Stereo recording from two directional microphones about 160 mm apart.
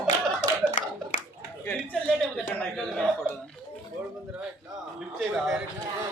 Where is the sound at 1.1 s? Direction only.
50° left (ahead or behind).